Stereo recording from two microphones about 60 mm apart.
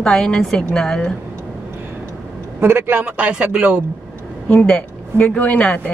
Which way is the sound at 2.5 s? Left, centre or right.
Right.